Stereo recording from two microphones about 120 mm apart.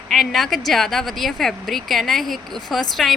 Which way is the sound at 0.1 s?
Centre (ahead or behind).